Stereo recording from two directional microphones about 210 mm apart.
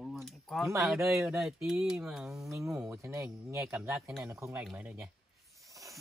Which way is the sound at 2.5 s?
15° right (ahead or behind).